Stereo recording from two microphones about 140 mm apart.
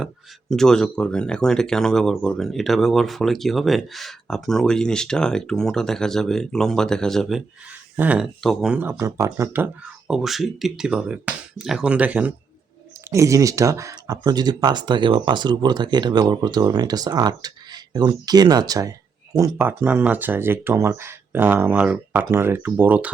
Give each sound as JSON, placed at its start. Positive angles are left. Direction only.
{"t": 0.5, "sound": "speech", "side_deg": 5}
{"t": 7.9, "sound": "speech", "side_deg": -10}
{"t": 8.4, "sound": "speech", "side_deg": 0}
{"t": 8.7, "sound": "speech", "side_deg": -15}
{"t": 10.1, "sound": "speech", "side_deg": 0}
{"t": 13.1, "sound": "speech", "side_deg": -20}